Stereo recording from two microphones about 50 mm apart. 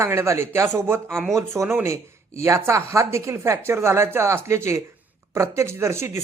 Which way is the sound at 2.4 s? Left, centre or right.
Right.